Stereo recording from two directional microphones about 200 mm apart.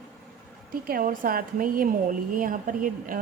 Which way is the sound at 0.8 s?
45° right (ahead or behind).